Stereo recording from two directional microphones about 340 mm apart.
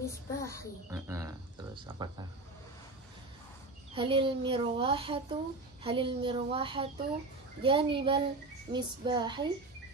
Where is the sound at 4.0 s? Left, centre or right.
Centre.